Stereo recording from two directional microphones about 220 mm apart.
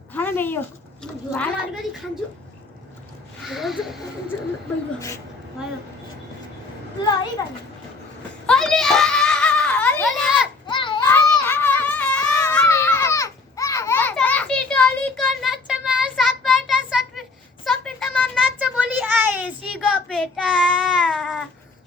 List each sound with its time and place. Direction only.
0.1 s a woman's voice: 10° left (ahead or behind)
3.4 s a woman's voice: centre (ahead or behind)
4.9 s a woman's voice: 15° left (ahead or behind)
7.4 s a woman's voice: 15° left (ahead or behind)
8.4 s children playing: 5° left (ahead or behind)
10.7 s children playing: 20° left (ahead or behind)
11.0 s a sound: 10° left (ahead or behind); by 19.5 s 5° right (ahead or behind)
20.1 s child singing: centre (ahead or behind)